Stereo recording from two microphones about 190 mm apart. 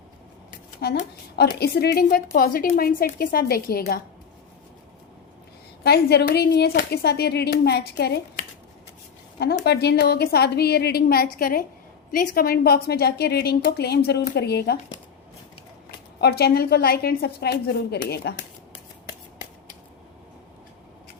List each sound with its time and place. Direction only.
0.8 s a woman's voice: 55° left (ahead or behind)
5.8 s speech: 55° left (ahead or behind)
9.6 s speech: 60° left (ahead or behind)
16.2 s speech: 55° left (ahead or behind)